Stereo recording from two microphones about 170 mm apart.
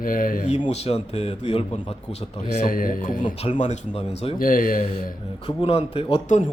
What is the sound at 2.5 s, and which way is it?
Speech, 50° left (ahead or behind).